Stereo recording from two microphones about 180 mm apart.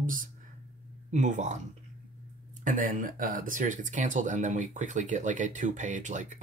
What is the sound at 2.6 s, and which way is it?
Speech, 50° right (ahead or behind).